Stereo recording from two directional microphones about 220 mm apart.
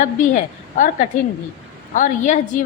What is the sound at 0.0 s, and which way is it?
A woman's voice, 35° left (ahead or behind).